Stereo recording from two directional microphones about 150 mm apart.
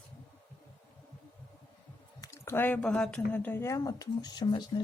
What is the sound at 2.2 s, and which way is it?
Speech, 20° left (ahead or behind).